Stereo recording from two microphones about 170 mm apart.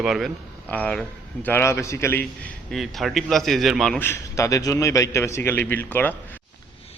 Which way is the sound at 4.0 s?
15° left (ahead or behind).